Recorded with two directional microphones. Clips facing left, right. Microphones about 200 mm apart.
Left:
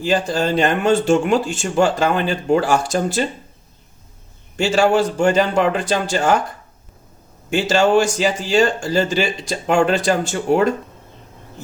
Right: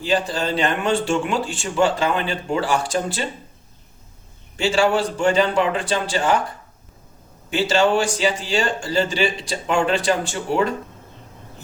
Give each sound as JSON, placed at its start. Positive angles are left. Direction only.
{"t": 0.0, "sound": "speech", "side_deg": 45}
{"t": 4.5, "sound": "speech", "side_deg": 45}
{"t": 7.5, "sound": "speech", "side_deg": 45}